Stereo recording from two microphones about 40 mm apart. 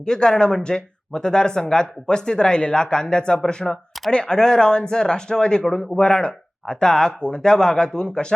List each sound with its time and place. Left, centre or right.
0.0 s speech: centre